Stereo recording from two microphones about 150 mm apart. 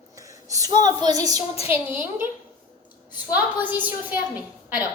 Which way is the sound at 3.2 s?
10° right (ahead or behind).